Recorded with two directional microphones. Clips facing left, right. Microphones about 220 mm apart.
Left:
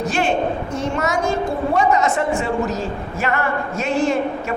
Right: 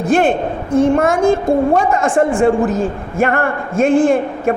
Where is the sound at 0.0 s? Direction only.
55° right (ahead or behind).